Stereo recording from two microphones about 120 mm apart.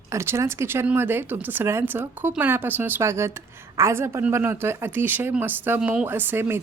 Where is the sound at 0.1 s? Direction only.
25° right (ahead or behind).